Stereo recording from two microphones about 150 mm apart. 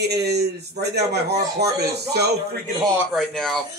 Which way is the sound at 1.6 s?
90° right.